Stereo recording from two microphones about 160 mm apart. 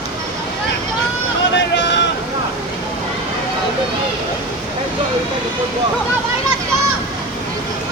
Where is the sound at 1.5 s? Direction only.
90° left.